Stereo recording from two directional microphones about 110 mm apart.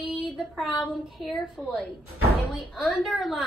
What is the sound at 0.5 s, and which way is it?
A woman's voice, centre (ahead or behind).